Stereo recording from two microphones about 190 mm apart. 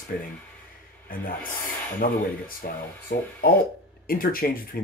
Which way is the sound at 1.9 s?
50° left (ahead or behind).